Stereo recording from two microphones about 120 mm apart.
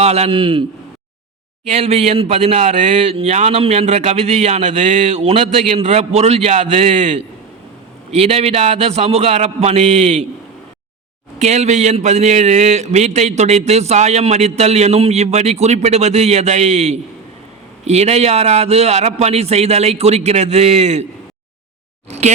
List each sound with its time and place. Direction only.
0.0 s a man's voice: 65° right (ahead or behind); by 0.6 s 50° right (ahead or behind)
1.6 s speech: 60° right (ahead or behind); by 7.2 s 75° right (ahead or behind)
8.1 s speech: 60° right (ahead or behind)
11.3 s speech: 70° right (ahead or behind)